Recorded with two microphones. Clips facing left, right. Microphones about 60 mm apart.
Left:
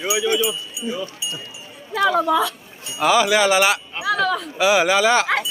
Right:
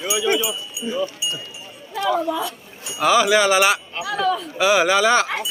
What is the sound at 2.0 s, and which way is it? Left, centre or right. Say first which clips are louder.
Speech: left 3 dB; left.